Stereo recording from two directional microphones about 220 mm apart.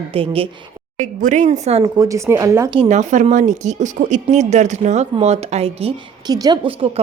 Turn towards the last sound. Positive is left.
turn(degrees=-25)  # may be behind; listen again after turning